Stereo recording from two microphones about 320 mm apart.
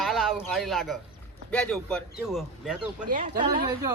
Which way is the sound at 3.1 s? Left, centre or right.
Right.